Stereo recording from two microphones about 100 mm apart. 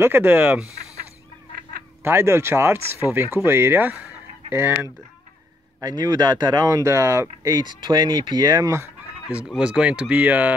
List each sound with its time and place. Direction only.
0.0 s speech: 20° right (ahead or behind)
2.0 s speech: 25° right (ahead or behind)
4.5 s speech: 25° right (ahead or behind)
5.8 s speech: 40° right (ahead or behind)
9.6 s speech: 10° right (ahead or behind)